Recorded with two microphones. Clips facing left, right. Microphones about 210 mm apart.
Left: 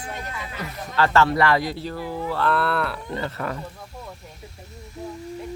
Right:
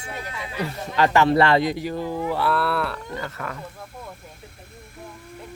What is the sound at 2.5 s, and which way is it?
Speech, centre (ahead or behind).